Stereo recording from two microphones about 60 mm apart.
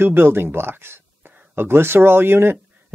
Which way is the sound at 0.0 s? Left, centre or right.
Right.